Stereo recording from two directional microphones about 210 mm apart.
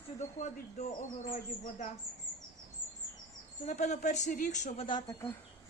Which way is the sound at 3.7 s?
35° left (ahead or behind).